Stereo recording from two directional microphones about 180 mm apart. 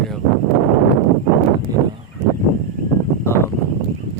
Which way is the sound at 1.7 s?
20° right (ahead or behind).